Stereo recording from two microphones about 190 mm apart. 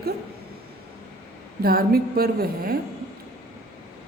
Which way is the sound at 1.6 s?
50° right (ahead or behind).